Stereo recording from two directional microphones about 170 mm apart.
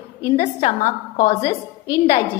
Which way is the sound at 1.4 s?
20° left (ahead or behind).